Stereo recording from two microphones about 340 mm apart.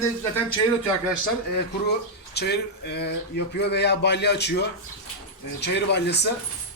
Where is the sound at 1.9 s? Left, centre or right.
Left.